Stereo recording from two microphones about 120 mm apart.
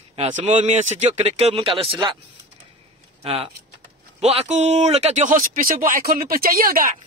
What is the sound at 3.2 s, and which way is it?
Speech, 55° right (ahead or behind).